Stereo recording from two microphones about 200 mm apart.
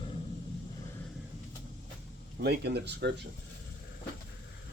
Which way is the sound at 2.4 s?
55° right (ahead or behind).